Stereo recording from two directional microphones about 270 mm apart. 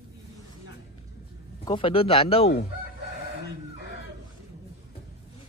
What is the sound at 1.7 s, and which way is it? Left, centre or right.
Speech, centre.